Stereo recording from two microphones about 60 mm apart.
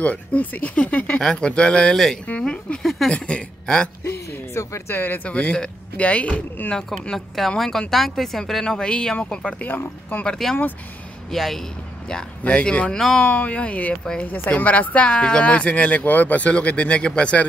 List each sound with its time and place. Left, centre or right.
0.0 s speech: left
1.2 s a woman's voice: centre
2.8 s speech: centre
3.1 s a woman's voice: centre
4.6 s speech: left
4.9 s speech: left
5.3 s speech: centre
6.9 s a woman's voice: centre
12.1 s a woman's voice: centre